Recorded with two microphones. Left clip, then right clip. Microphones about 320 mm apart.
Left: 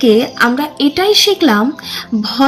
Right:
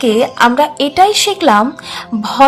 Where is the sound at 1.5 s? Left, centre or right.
Right.